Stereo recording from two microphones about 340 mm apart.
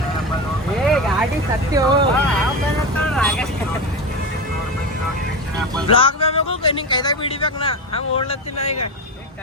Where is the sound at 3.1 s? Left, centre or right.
Centre.